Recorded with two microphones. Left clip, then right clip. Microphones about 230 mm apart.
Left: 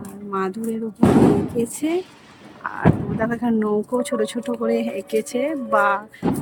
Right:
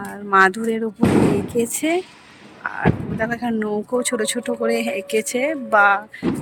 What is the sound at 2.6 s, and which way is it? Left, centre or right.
Speech, centre.